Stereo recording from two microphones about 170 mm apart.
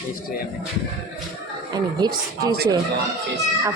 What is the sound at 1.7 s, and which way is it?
Speech, 20° right (ahead or behind).